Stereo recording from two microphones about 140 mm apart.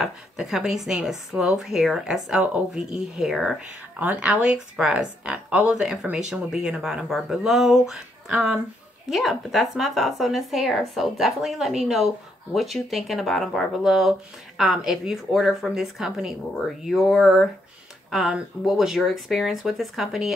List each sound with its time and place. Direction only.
0.0 s speech: 5° right (ahead or behind)